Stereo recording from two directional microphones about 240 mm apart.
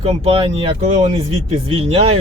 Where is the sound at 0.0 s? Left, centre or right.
Right.